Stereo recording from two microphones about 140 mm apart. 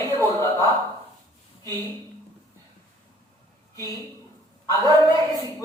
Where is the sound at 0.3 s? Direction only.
25° left (ahead or behind).